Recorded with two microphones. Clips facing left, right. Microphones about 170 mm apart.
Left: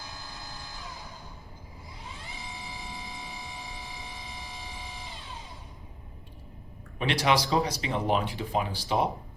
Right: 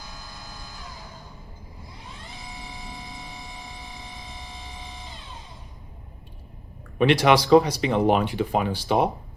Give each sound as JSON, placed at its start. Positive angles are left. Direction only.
{"t": 0.4, "sound": "vehicle", "side_deg": 20}
{"t": 0.9, "sound": "music", "side_deg": 0}
{"t": 2.6, "sound": "vehicle", "side_deg": 0}
{"t": 7.0, "sound": "speech", "side_deg": -65}